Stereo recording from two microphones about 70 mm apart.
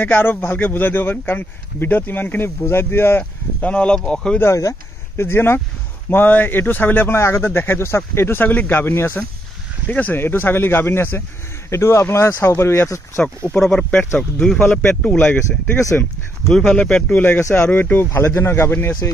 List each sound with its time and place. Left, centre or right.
0.0 s a man's voice: left
3.6 s speech: centre
4.4 s speech: left
9.8 s a man's voice: left
10.2 s speech: left
11.7 s speech: left
13.6 s speech: centre
13.9 s a man's voice: left
15.3 s a man's voice: left
16.4 s speech: centre
17.4 s speech: left
17.6 s a man's voice: left
18.1 s speech: left